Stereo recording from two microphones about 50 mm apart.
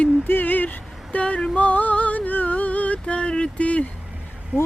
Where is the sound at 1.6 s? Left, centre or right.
Left.